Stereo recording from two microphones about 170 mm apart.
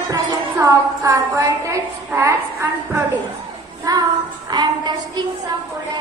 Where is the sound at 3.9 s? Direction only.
20° right (ahead or behind).